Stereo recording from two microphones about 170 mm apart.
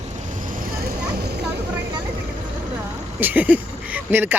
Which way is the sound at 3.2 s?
10° right (ahead or behind).